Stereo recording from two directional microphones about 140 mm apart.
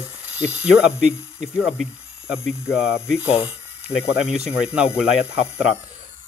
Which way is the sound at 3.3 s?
45° left (ahead or behind).